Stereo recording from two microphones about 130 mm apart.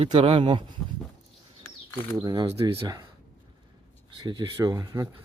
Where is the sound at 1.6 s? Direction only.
20° left (ahead or behind).